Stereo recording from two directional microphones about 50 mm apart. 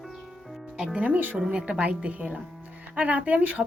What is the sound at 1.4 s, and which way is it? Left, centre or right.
Speech, centre.